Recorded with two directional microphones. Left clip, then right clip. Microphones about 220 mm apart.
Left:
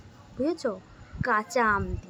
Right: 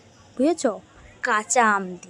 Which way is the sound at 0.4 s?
35° right (ahead or behind).